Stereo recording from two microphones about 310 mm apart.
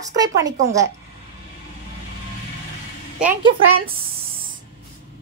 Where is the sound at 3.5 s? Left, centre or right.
Right.